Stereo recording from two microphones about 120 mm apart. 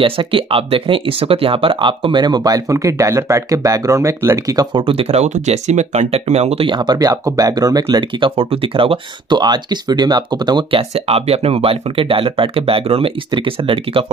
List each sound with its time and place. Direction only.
0.0 s speech: 50° right (ahead or behind); by 4.6 s 25° right (ahead or behind)
4.7 s speech: 50° right (ahead or behind)
6.6 s speech: 40° right (ahead or behind)
8.4 s speech: 50° right (ahead or behind)
11.1 s speech: 55° right (ahead or behind)